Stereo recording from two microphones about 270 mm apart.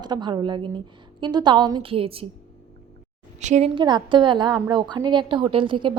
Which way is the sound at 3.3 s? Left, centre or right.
Right.